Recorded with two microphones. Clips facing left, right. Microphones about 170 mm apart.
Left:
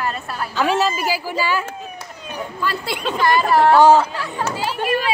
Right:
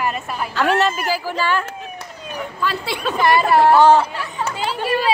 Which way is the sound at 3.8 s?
10° left (ahead or behind).